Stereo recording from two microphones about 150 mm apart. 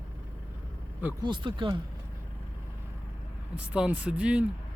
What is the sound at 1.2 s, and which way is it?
Speech, 30° right (ahead or behind).